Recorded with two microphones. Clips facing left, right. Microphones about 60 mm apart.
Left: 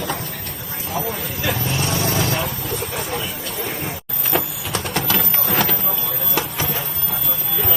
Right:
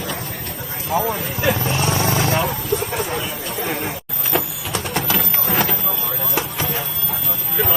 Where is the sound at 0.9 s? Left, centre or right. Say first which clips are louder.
Right 5 dB; right.